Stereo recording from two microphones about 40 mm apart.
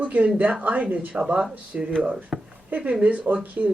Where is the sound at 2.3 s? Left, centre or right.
Centre.